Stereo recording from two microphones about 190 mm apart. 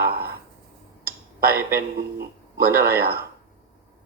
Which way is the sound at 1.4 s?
10° right (ahead or behind).